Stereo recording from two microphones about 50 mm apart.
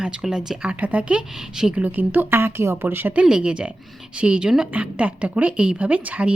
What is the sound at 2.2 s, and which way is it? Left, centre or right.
Speech, right.